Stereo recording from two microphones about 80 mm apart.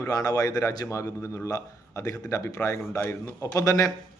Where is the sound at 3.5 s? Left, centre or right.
Left.